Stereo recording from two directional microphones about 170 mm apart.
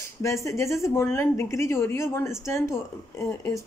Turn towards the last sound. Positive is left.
turn(degrees=15)  # may be behind; listen again after turning